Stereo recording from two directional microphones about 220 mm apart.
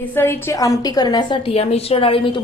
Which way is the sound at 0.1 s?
10° left (ahead or behind).